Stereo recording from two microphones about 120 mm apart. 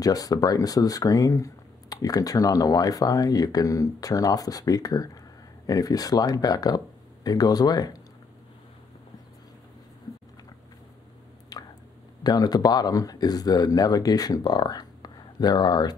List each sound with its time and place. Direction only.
0.0 s speech: 30° left (ahead or behind)
11.5 s squish: 35° left (ahead or behind)
12.2 s speech: 35° left (ahead or behind)